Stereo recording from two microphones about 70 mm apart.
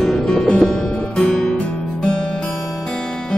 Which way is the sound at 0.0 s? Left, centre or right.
Centre.